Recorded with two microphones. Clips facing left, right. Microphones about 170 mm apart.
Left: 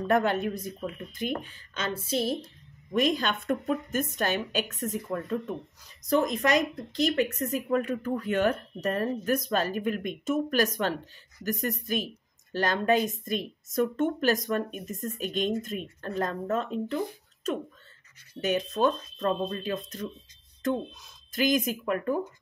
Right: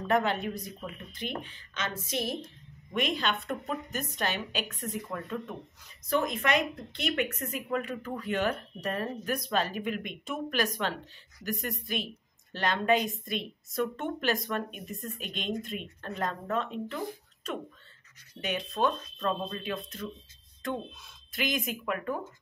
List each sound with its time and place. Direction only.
0.1 s speech: 50° left (ahead or behind); by 2.3 s 30° left (ahead or behind)
2.9 s a woman's voice: 40° left (ahead or behind)